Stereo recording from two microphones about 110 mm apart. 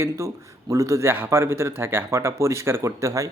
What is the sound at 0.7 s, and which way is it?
Speech, 30° right (ahead or behind).